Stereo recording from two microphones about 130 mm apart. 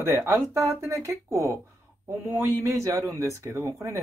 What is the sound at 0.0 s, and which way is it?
Speech, 20° right (ahead or behind).